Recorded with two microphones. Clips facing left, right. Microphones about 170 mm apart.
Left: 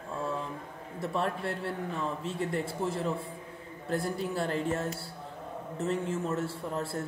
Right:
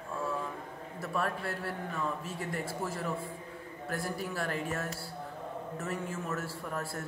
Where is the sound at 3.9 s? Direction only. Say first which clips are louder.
Left 5 dB; 25° left (ahead or behind).